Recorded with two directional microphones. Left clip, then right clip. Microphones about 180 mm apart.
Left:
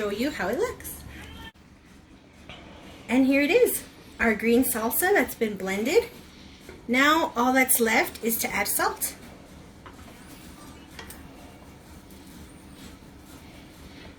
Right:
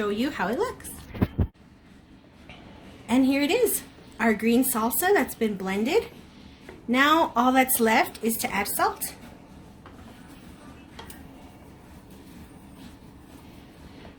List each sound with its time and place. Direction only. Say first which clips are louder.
0.2 s a woman's voice: even; 55° right (ahead or behind)
3.1 s a woman's voice: left 2 dB; 60° right (ahead or behind)